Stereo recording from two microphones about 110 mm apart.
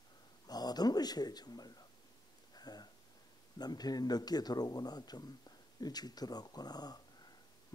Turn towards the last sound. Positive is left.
turn(degrees=35)  # may be behind; listen again after turning